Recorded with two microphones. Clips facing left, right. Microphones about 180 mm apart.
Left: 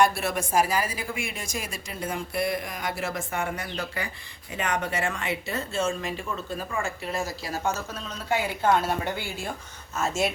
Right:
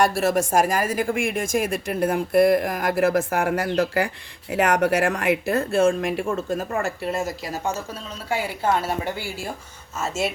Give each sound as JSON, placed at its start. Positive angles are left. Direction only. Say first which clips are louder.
{"t": 0.0, "sound": "speech", "louder": "right 4 dB", "side_deg": -45}
{"t": 7.1, "sound": "a woman's voice", "louder": "right 4 dB", "side_deg": -25}